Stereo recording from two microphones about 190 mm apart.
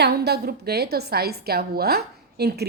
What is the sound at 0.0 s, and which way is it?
A woman's voice, 55° right (ahead or behind).